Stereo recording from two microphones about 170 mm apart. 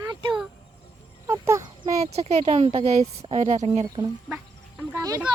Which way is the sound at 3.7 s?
30° right (ahead or behind).